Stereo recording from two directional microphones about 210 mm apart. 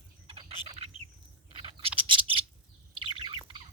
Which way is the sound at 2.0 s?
25° right (ahead or behind).